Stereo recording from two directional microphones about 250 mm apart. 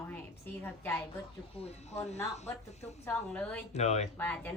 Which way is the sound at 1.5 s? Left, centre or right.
Left.